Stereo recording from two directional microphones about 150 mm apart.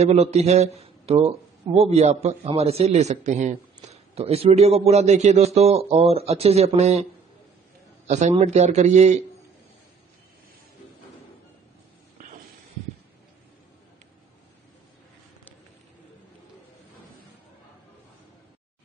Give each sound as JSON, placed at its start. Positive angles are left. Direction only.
{"t": 0.0, "sound": "a man's voice", "side_deg": -45}
{"t": 8.1, "sound": "a man's voice", "side_deg": -50}